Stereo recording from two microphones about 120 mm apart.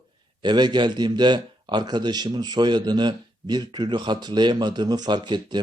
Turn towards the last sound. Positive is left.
turn(degrees=-40)  # may be behind; listen again after turning